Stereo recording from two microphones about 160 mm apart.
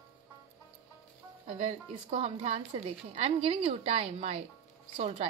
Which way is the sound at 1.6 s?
40° right (ahead or behind).